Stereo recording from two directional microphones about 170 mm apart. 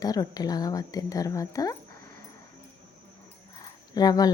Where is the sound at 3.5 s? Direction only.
25° left (ahead or behind).